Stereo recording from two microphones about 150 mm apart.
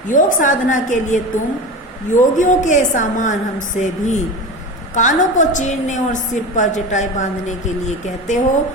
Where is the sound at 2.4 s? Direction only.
55° left (ahead or behind).